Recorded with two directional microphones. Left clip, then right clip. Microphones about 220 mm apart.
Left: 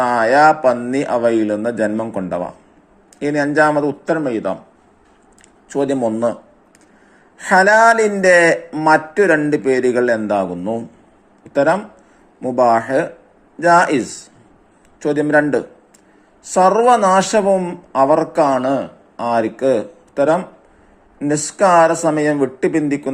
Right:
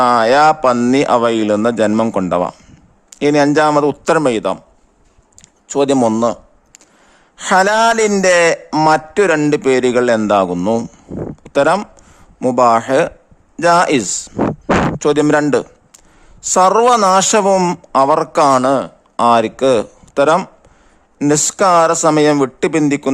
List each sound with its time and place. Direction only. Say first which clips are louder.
0.0 s a man's voice: right 2 dB; 30° right (ahead or behind)
5.6 s a man's voice: right 5 dB; 35° right (ahead or behind)
6.1 s a sound: right 3 dB; 25° right (ahead or behind)
7.3 s a man's voice: left 1 dB; 35° right (ahead or behind)